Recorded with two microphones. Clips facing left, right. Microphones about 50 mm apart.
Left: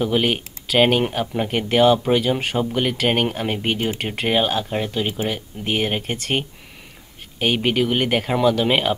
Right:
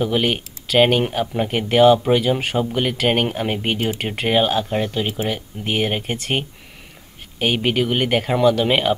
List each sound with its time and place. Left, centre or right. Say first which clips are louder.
0.0 s speech: even; centre